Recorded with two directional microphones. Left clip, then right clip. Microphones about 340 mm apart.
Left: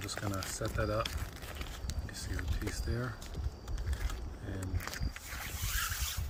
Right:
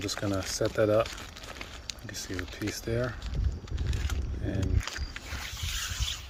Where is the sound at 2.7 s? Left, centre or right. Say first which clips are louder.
Right 9 dB; right.